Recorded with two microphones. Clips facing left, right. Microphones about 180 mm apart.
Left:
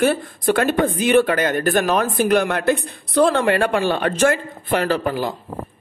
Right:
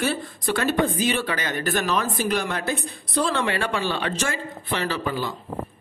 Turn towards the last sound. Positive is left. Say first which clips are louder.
# left 6 dB
turn(degrees=50)  # may be behind; listen again after turning